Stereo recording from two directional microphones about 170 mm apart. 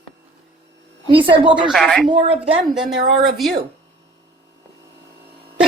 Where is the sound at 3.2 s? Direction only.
Centre (ahead or behind).